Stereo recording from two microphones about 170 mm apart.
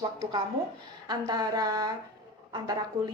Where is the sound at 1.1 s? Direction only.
25° right (ahead or behind).